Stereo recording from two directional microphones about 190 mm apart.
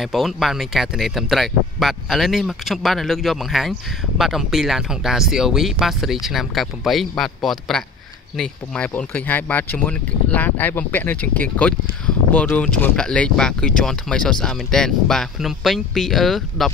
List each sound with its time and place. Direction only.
0.0 s speech: centre (ahead or behind)